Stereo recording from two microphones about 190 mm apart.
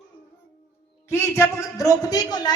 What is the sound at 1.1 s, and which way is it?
Speech, 15° left (ahead or behind).